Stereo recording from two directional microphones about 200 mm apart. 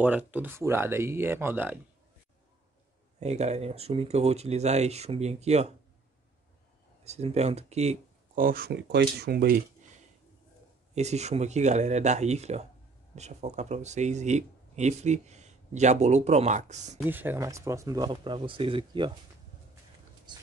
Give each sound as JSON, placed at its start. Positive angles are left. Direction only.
{"t": 0.0, "sound": "speech", "side_deg": -10}
{"t": 3.2, "sound": "speech", "side_deg": -35}
{"t": 7.1, "sound": "speech", "side_deg": -30}
{"t": 11.0, "sound": "speech", "side_deg": -35}
{"t": 17.0, "sound": "speech", "side_deg": -10}